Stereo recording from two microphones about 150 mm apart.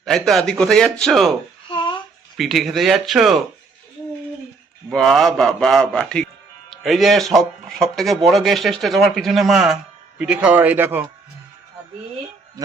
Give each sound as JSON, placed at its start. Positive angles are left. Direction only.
{"t": 0.0, "sound": "speech", "side_deg": 0}
{"t": 1.7, "sound": "a sound", "side_deg": 35}
{"t": 2.4, "sound": "speech", "side_deg": 0}
{"t": 4.9, "sound": "speech", "side_deg": 0}
{"t": 12.6, "sound": "music", "side_deg": -25}